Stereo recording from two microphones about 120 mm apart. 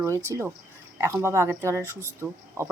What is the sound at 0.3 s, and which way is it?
Speech, 20° right (ahead or behind).